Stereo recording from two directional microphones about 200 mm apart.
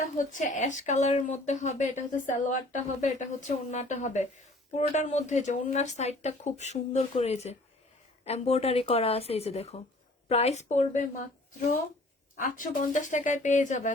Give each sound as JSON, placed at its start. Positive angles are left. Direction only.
{"t": 0.3, "sound": "speech", "side_deg": 40}
{"t": 12.4, "sound": "speech", "side_deg": 40}